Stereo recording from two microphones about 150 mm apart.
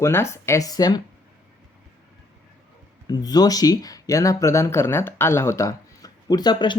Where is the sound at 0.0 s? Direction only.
20° left (ahead or behind).